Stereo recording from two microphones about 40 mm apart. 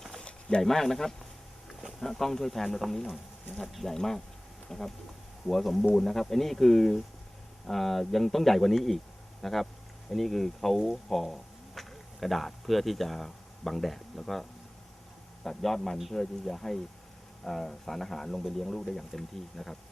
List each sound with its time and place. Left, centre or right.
0.2 s a sound: left
0.6 s speech: centre
15.4 s speech: centre